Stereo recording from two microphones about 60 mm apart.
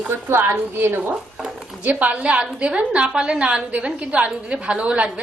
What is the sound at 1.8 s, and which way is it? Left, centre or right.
A woman's voice, right.